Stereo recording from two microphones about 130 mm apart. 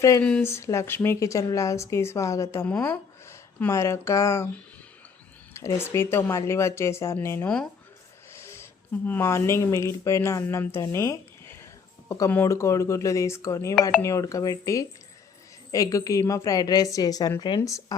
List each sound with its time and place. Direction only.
0.2 s speech: 10° left (ahead or behind)
0.4 s speech: 20° left (ahead or behind)
5.5 s speech: 20° left (ahead or behind)
7.4 s speech: 5° left (ahead or behind)
8.3 s a sound: 20° left (ahead or behind)
9.0 s speech: 20° left (ahead or behind)